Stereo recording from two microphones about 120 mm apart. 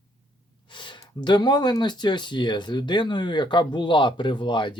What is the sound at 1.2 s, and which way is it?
Speech, 40° left (ahead or behind).